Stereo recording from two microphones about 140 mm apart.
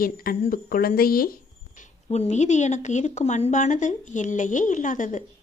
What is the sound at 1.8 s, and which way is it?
A woman's voice, 55° left (ahead or behind).